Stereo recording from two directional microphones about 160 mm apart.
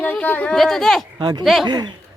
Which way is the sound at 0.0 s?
10° left (ahead or behind).